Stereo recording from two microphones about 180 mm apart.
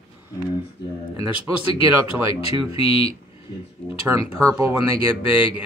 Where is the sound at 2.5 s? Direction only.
30° left (ahead or behind).